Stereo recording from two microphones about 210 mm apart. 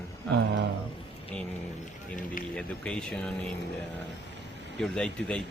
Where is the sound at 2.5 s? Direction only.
5° left (ahead or behind).